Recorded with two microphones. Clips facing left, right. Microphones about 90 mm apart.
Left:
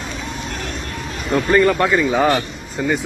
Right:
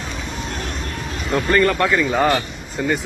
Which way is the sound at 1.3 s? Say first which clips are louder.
Left 2 dB; 5° left (ahead or behind).